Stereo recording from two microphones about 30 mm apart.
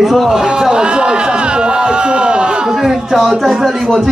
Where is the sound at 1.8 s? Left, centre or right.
Right.